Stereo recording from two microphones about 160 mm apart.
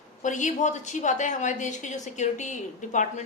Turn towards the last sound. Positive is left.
turn(degrees=50)  # may be behind; listen again after turning